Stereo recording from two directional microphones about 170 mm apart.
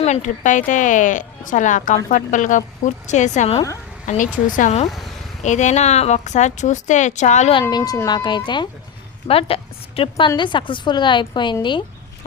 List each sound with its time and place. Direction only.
0.0 s a woman's voice: 45° left (ahead or behind)
7.6 s a woman's voice: 20° left (ahead or behind)